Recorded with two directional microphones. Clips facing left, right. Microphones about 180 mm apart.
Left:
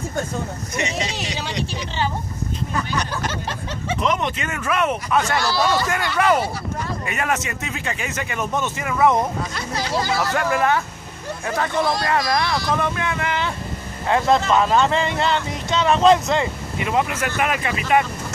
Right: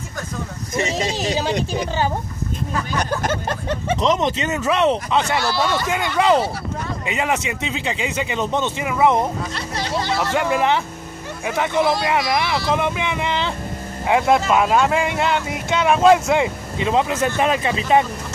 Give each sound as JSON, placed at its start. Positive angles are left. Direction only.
{"t": 0.7, "sound": "speech", "side_deg": -40}
{"t": 4.0, "sound": "speech", "side_deg": -30}
{"t": 10.3, "sound": "speech", "side_deg": -20}
{"t": 12.7, "sound": "speech", "side_deg": -15}
{"t": 16.7, "sound": "speech", "side_deg": -25}